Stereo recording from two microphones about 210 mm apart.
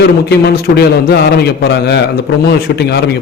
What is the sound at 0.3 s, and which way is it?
A man's voice, 50° left (ahead or behind).